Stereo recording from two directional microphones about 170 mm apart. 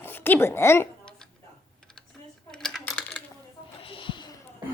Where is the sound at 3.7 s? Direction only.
30° left (ahead or behind).